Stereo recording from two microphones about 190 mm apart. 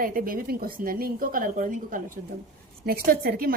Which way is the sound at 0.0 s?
50° right (ahead or behind).